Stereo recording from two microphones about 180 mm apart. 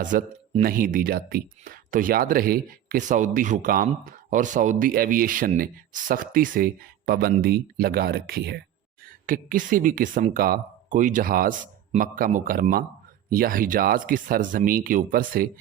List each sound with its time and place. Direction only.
0.0 s speech: 45° right (ahead or behind); by 8.6 s 60° right (ahead or behind)
9.2 s speech: 50° right (ahead or behind)